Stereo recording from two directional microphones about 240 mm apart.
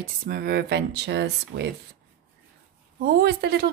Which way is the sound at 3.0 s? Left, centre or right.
Right.